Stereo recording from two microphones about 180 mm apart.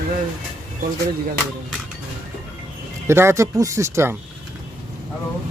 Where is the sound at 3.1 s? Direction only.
15° right (ahead or behind).